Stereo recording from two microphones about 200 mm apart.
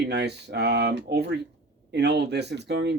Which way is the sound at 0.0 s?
55° right (ahead or behind).